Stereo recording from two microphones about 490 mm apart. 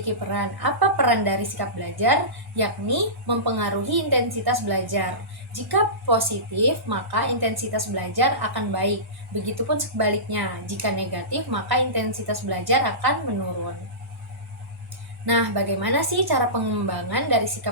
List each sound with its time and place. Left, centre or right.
0.0 s a woman's voice: right
15.3 s a woman's voice: right